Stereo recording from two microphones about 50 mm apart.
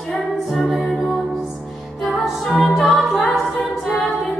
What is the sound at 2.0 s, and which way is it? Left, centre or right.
Music, centre.